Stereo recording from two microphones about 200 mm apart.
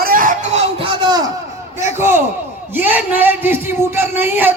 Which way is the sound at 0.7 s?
25° right (ahead or behind).